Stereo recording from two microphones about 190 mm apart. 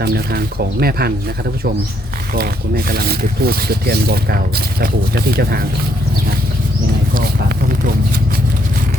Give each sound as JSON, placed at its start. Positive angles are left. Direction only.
{"t": 0.0, "sound": "speech", "side_deg": -55}
{"t": 2.3, "sound": "speech", "side_deg": -55}
{"t": 7.1, "sound": "a sound", "side_deg": -50}